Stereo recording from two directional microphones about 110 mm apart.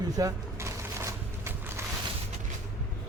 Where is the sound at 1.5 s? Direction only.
20° right (ahead or behind).